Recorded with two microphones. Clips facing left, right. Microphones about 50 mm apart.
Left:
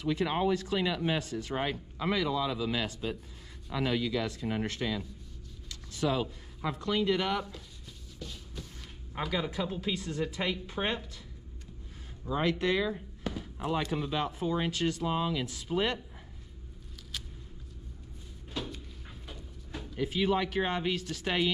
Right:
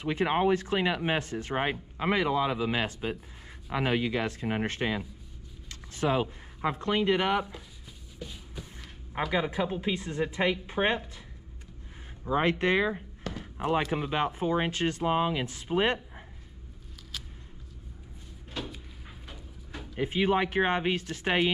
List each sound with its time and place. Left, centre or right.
0.0 s speech: right
8.2 s a sound: centre
9.3 s speech: right
12.3 s speech: right
18.5 s cupboard open or close: centre
19.2 s a sound: centre
20.0 s speech: right